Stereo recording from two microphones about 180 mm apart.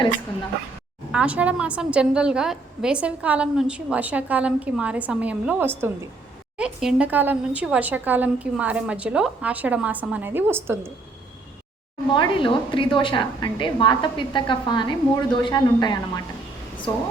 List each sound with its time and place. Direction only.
1.1 s a woman's voice: 5° right (ahead or behind)
12.1 s a woman's voice: 25° left (ahead or behind)